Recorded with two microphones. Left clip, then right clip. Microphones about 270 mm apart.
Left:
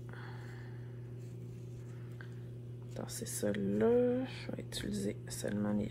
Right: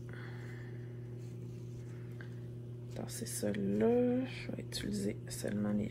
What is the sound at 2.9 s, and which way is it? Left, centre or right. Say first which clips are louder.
Speech: left 1 dB; centre.